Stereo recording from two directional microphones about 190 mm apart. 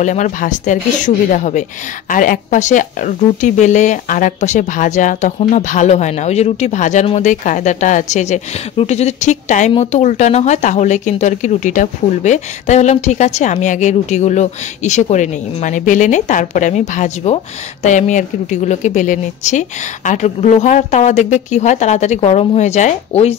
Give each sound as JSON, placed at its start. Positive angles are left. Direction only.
{"t": 0.0, "sound": "speech", "side_deg": 40}